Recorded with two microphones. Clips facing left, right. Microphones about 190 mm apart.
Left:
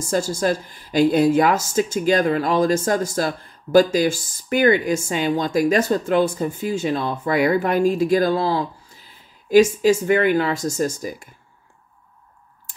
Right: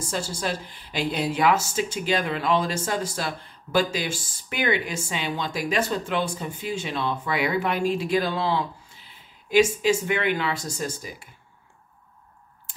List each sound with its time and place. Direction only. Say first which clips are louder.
0.0 s speech: left 8 dB; 45° left (ahead or behind)